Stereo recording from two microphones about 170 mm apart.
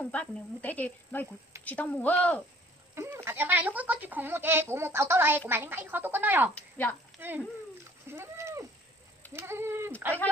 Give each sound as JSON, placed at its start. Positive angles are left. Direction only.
{"t": 0.0, "sound": "speech", "side_deg": 10}
{"t": 2.9, "sound": "a sound", "side_deg": -15}
{"t": 3.2, "sound": "speech", "side_deg": -10}
{"t": 6.5, "sound": "speech", "side_deg": 10}
{"t": 7.2, "sound": "speech", "side_deg": -10}
{"t": 8.1, "sound": "a sound", "side_deg": -15}
{"t": 9.3, "sound": "speech", "side_deg": -15}